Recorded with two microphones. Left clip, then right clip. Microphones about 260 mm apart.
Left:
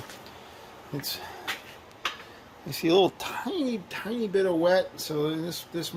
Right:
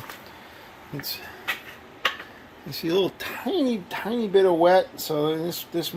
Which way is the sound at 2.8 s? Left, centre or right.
Left.